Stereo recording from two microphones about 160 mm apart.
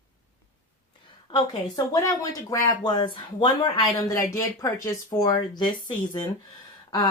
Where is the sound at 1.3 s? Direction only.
30° left (ahead or behind).